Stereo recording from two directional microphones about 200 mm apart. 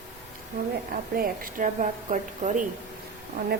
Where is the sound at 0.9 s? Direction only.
45° right (ahead or behind).